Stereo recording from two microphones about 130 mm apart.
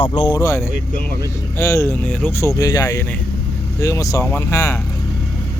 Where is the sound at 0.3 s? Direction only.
20° left (ahead or behind).